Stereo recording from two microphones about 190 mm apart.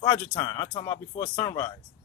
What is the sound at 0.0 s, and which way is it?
Music, 15° left (ahead or behind).